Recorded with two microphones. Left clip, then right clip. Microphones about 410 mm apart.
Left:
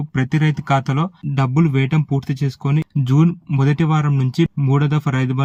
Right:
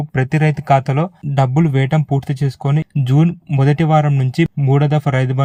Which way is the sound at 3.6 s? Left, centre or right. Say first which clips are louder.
Right 6 dB; centre.